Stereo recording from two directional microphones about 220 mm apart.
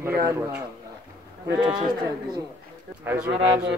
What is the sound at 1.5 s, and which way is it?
Speech, 20° right (ahead or behind).